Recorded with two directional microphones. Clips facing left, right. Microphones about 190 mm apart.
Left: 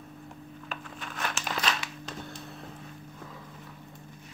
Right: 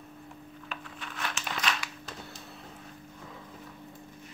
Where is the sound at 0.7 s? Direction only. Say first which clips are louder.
Left 2 dB; 45° left (ahead or behind).